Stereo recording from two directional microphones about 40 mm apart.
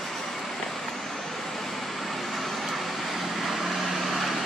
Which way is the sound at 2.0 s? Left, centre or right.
Centre.